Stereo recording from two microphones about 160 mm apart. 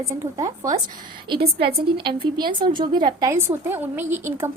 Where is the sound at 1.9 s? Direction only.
30° right (ahead or behind); by 4.5 s 15° right (ahead or behind).